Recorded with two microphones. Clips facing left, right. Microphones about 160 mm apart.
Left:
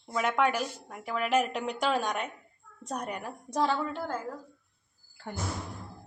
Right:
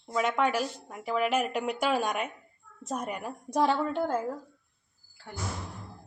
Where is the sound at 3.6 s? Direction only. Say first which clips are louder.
Right 2 dB; 20° right (ahead or behind).